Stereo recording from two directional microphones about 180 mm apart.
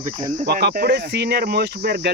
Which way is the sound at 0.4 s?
65° right (ahead or behind).